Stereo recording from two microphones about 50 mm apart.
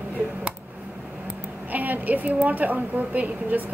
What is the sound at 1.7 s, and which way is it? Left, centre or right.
A woman's voice, right.